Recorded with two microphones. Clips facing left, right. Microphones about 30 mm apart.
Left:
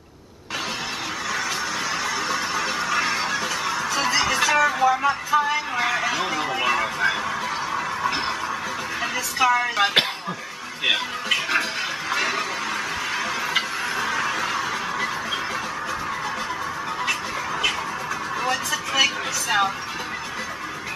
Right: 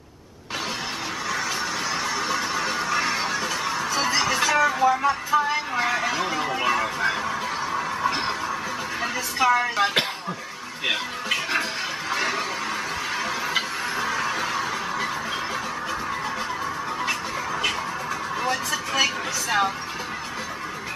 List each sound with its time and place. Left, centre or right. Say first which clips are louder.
2.1 s music: left 1 dB; centre
5.8 s a sound: even; centre
9.4 s speech: left 1 dB; centre
9.8 s speech: left 2 dB; centre
12.1 s a sound: left 1 dB; centre
13.5 s fowl: left 1 dB; centre
18.4 s vehicle: left 1 dB; centre
18.9 s speech: left 3 dB; centre